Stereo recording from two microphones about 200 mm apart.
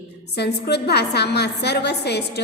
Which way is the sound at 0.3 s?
55° left (ahead or behind).